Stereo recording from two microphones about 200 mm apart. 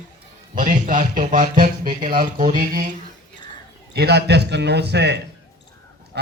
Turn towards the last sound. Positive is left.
turn(degrees=-55)  # may be behind; listen again after turning